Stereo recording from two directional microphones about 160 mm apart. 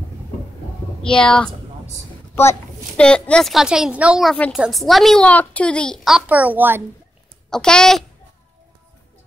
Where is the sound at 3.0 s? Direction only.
5° left (ahead or behind); by 6.8 s 10° right (ahead or behind).